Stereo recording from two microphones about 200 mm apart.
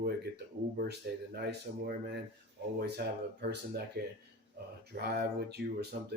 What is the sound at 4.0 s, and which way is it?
Speech, 50° right (ahead or behind).